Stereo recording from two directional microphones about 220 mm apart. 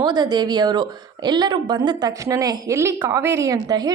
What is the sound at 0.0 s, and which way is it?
Speech, 20° right (ahead or behind).